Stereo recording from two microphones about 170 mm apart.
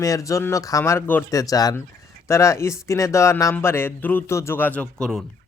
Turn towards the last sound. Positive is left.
turn(degrees=5)  # may be behind; listen again after turning